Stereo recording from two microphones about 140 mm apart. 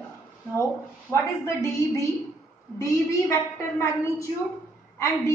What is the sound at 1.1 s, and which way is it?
A woman's voice, 20° left (ahead or behind).